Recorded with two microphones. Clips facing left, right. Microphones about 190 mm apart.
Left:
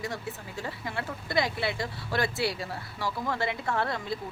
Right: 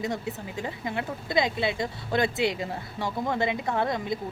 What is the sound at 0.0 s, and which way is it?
Speech, 20° right (ahead or behind).